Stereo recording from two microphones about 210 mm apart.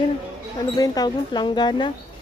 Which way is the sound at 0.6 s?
20° left (ahead or behind).